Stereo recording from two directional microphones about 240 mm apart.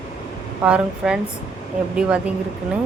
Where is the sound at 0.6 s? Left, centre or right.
Centre.